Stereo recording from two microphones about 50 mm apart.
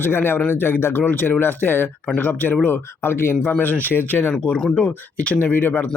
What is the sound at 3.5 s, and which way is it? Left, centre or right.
Speech, left.